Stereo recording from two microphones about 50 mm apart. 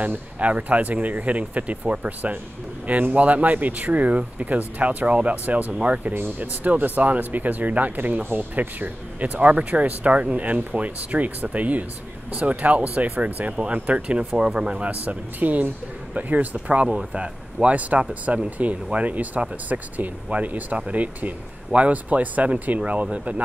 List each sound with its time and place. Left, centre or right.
0.4 s speech: right
6.1 s speech: right